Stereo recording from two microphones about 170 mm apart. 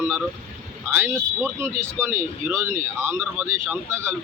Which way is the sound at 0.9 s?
15° right (ahead or behind).